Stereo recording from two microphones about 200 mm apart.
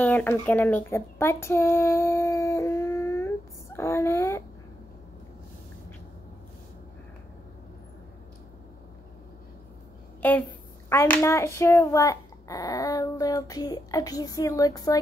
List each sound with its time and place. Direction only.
0.0 s speech: 10° left (ahead or behind)
10.9 s a child's voice: 15° left (ahead or behind)